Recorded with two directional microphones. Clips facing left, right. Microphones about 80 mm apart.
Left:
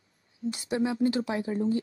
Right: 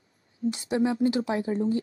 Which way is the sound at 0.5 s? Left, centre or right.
Right.